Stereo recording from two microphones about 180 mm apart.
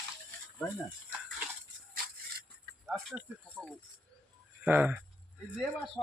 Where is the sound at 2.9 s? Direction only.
Centre (ahead or behind).